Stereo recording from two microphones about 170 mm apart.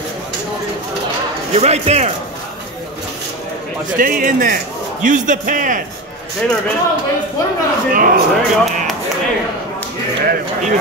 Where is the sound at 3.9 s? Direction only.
55° right (ahead or behind).